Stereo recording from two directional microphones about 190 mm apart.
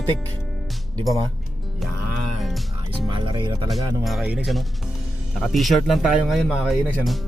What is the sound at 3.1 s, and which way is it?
Speech, 25° right (ahead or behind).